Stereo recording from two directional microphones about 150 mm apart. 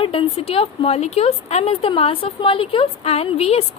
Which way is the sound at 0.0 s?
40° left (ahead or behind).